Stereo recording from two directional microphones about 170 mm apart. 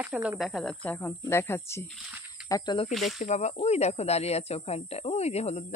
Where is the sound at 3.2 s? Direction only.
40° left (ahead or behind).